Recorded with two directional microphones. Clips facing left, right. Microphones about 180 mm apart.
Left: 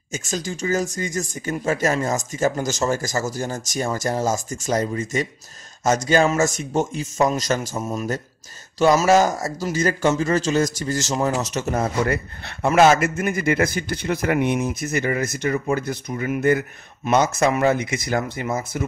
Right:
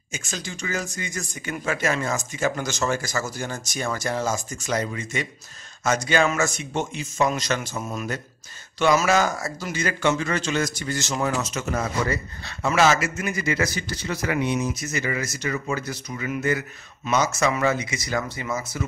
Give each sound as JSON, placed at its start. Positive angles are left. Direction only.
{"t": 0.1, "sound": "speech", "side_deg": 40}
{"t": 11.8, "sound": "a man's voice", "side_deg": 55}